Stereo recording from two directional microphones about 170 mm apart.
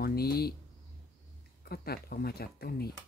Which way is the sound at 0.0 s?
65° left (ahead or behind).